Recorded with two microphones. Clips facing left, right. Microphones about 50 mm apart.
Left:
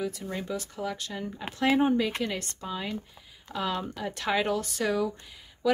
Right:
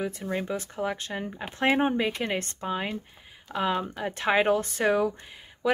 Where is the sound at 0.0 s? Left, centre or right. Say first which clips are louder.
Right 3 dB; right.